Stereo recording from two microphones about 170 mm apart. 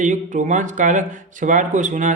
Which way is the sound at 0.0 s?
50° right (ahead or behind).